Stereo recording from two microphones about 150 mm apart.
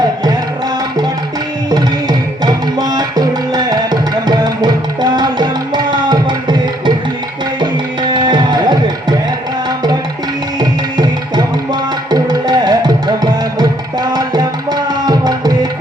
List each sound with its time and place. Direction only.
1.7 s music: 25° right (ahead or behind)
7.6 s tabla: 30° right (ahead or behind)
10.6 s tabla: 30° right (ahead or behind)